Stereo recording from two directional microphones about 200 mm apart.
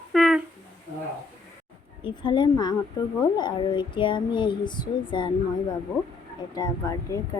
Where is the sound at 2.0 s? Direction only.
25° left (ahead or behind).